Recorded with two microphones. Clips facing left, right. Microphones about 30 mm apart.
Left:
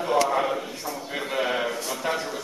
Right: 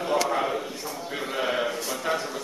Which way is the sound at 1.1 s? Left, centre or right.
Centre.